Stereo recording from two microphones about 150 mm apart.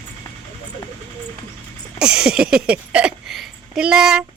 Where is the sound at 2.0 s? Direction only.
5° right (ahead or behind).